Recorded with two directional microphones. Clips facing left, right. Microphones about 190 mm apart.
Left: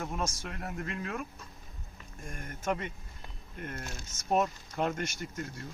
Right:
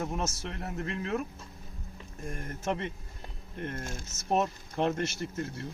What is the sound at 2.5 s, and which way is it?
Speech, 30° right (ahead or behind).